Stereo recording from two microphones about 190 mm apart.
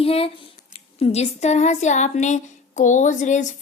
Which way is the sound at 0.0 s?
30° left (ahead or behind).